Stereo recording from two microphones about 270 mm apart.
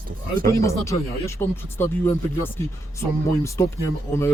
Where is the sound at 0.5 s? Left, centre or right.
Centre.